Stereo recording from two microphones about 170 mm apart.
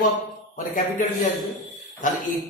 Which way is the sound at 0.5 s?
50° left (ahead or behind).